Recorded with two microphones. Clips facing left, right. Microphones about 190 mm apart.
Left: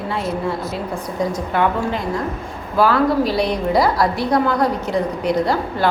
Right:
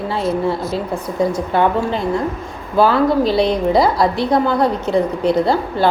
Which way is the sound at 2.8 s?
25° right (ahead or behind).